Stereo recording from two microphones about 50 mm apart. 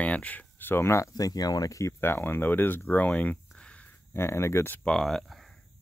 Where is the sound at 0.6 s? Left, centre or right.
Left.